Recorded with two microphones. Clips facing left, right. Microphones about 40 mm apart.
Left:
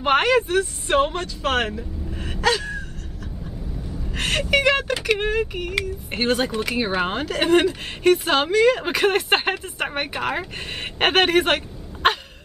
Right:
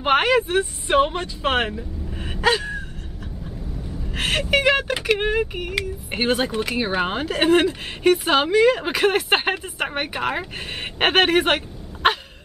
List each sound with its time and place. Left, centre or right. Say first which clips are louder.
0.0 s speech: even; centre
1.8 s speech: even; centre
4.1 s speech: even; centre